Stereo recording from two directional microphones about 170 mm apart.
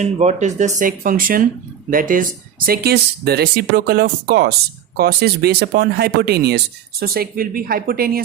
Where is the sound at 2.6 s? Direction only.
65° right (ahead or behind).